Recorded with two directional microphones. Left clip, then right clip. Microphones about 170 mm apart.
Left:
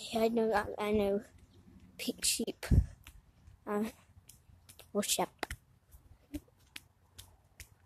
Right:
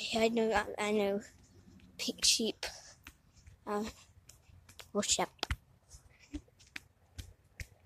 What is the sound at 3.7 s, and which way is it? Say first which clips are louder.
Speech: left 1 dB; 20° left (ahead or behind).